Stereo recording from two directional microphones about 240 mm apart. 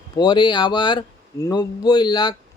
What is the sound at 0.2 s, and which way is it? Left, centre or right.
Speech, centre.